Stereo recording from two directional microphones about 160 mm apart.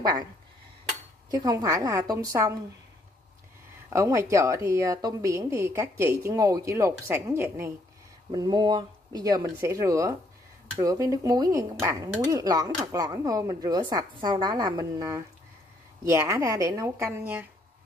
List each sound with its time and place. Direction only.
1.3 s speech: 25° right (ahead or behind)
3.9 s speech: 20° right (ahead or behind)
8.3 s speech: 25° right (ahead or behind); by 17.5 s 10° right (ahead or behind)